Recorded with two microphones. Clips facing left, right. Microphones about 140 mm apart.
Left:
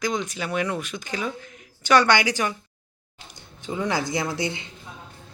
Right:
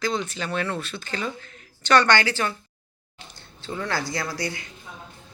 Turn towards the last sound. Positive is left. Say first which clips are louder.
# left 3 dB
turn(degrees=20)  # may be behind; listen again after turning